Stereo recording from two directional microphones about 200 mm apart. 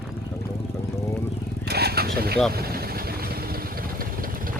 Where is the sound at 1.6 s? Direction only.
50° right (ahead or behind).